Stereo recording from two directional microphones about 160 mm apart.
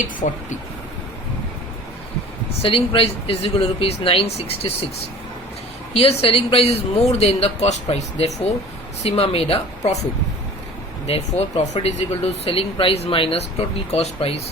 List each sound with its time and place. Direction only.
0.2 s speech: 50° left (ahead or behind)
2.6 s a woman's voice: 35° left (ahead or behind)
5.9 s a woman's voice: 35° left (ahead or behind)
11.3 s a woman's voice: 40° left (ahead or behind)